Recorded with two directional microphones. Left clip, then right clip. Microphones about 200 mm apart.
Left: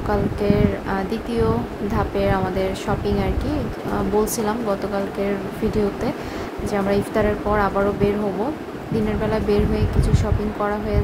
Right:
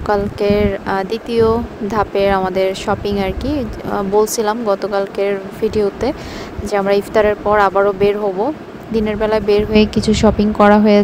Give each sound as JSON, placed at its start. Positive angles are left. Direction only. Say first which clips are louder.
{"t": 0.1, "sound": "speech", "louder": "right 6 dB", "side_deg": -35}